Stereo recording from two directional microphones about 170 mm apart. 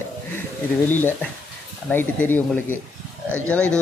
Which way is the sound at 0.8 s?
10° left (ahead or behind).